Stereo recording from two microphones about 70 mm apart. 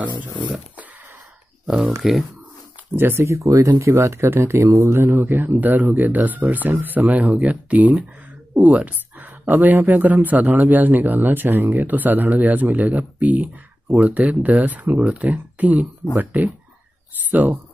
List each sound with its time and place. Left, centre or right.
2.0 s speech: centre
3.0 s speech: right
3.3 s speech: right
3.6 s speech: right
4.9 s speech: right